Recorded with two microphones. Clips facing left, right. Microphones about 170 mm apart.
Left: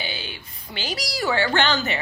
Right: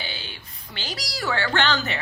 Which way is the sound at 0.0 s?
10° left (ahead or behind).